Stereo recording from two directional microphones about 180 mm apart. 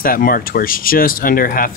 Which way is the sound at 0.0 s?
50° left (ahead or behind).